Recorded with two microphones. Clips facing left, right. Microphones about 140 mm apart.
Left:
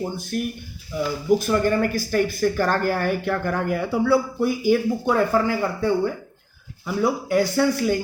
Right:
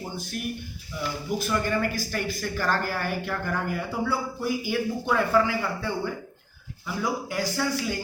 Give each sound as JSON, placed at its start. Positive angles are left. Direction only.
{"t": 0.3, "sound": "speech", "side_deg": 45}